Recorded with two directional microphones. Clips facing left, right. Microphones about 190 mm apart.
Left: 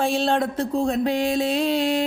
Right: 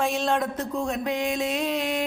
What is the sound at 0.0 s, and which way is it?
A woman's voice, 30° left (ahead or behind).